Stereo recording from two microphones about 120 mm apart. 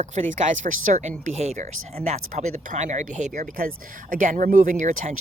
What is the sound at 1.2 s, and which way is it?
A woman's voice, 80° right.